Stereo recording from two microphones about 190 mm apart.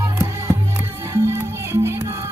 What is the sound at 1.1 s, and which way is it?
Music, 15° right (ahead or behind).